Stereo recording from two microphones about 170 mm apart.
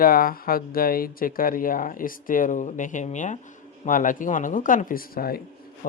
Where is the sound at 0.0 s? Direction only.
60° left (ahead or behind).